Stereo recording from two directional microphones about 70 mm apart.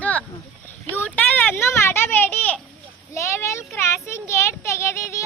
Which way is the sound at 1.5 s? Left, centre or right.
Left.